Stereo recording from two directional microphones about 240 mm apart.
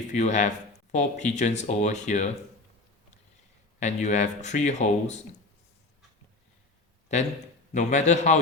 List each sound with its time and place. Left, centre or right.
0.1 s speech: left
3.8 s speech: left
7.1 s a man's voice: left